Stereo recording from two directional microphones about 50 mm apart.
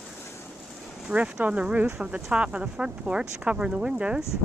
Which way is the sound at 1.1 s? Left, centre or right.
Right.